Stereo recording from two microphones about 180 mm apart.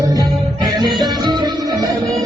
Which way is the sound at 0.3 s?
Centre (ahead or behind).